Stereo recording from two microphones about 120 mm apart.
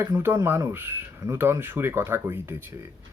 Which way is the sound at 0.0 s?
20° right (ahead or behind).